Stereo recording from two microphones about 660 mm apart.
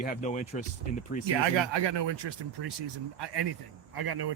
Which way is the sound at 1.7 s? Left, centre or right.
Right.